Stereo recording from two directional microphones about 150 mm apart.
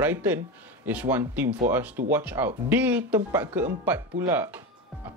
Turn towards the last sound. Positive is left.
turn(degrees=-15)  # may be behind; listen again after turning